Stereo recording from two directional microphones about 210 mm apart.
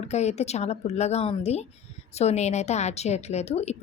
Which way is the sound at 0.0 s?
30° left (ahead or behind).